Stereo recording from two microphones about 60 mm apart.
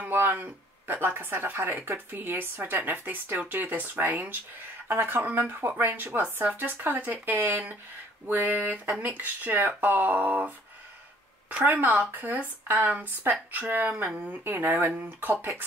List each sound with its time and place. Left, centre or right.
0.0 s speech: right
8.3 s a sound: right
9.0 s speech: right
11.6 s speech: right